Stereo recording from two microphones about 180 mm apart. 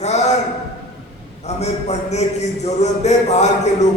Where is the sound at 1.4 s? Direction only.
35° left (ahead or behind).